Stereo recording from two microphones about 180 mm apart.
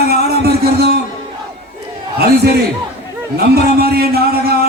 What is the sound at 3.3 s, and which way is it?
A man's voice, 60° right (ahead or behind).